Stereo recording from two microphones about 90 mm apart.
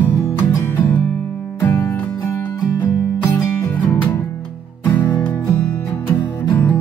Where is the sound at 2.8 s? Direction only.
20° left (ahead or behind).